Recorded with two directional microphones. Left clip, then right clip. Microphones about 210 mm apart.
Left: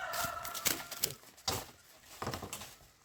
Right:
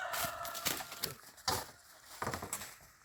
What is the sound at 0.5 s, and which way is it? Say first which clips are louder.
Chicken: left 2 dB; 25° left (ahead or behind).